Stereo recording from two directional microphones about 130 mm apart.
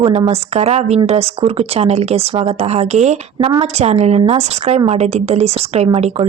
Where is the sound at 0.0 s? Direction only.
50° right (ahead or behind).